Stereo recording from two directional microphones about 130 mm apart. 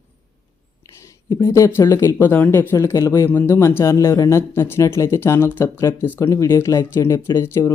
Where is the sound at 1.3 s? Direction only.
25° left (ahead or behind).